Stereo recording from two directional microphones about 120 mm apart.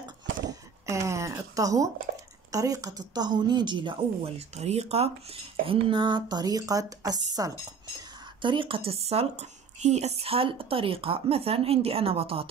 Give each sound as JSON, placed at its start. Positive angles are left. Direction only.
{"t": 0.5, "sound": "a sound", "side_deg": -25}
{"t": 2.5, "sound": "speech", "side_deg": -30}
{"t": 4.2, "sound": "speech", "side_deg": -60}
{"t": 8.4, "sound": "speech", "side_deg": -45}